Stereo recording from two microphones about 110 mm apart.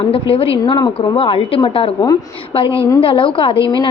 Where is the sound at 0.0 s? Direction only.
60° left (ahead or behind).